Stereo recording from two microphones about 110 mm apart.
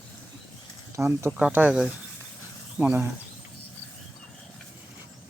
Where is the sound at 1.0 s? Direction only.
25° right (ahead or behind).